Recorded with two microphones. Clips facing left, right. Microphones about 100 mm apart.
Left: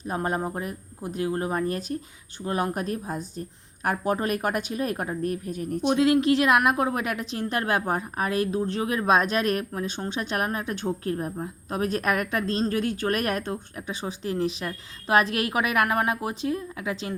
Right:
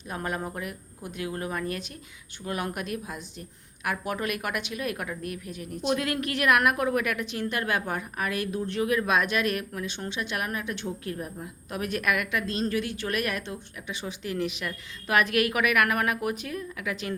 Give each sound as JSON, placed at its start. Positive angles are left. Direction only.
{"t": 0.0, "sound": "a woman's voice", "side_deg": 35}
{"t": 5.9, "sound": "a woman's voice", "side_deg": 25}